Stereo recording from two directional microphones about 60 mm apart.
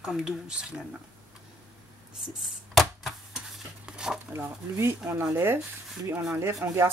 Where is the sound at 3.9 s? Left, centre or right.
Centre.